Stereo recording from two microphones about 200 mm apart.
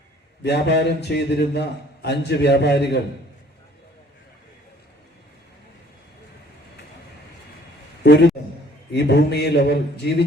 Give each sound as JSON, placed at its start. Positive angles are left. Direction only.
{"t": 0.4, "sound": "a man's voice", "side_deg": 60}
{"t": 8.0, "sound": "a man's voice", "side_deg": 60}